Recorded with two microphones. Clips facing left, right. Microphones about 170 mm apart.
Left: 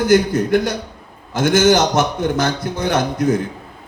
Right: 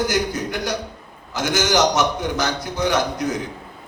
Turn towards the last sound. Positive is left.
turn(degrees=55)  # may be behind; listen again after turning